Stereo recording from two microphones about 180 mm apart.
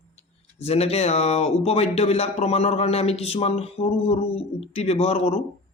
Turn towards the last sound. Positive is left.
turn(degrees=35)  # may be behind; listen again after turning